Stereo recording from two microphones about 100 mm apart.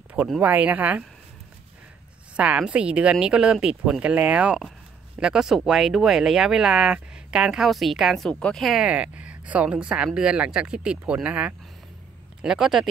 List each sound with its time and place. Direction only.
0.4 s a woman's voice: 15° right (ahead or behind)
2.3 s a woman's voice: 15° right (ahead or behind)
8.3 s a woman's voice: 10° left (ahead or behind)